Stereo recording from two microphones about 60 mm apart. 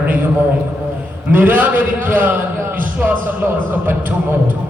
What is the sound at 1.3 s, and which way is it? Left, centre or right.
A man's voice, right.